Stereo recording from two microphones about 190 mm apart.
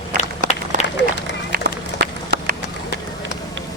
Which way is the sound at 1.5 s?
55° right (ahead or behind).